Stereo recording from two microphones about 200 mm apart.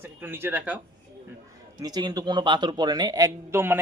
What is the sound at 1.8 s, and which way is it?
Speech, 20° right (ahead or behind).